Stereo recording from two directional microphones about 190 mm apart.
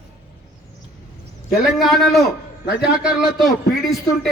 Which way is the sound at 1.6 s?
Centre (ahead or behind).